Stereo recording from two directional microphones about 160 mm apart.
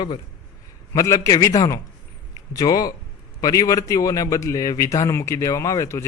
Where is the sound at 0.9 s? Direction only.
20° left (ahead or behind).